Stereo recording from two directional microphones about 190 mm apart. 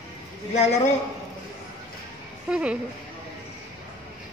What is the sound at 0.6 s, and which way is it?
Speech, 35° left (ahead or behind).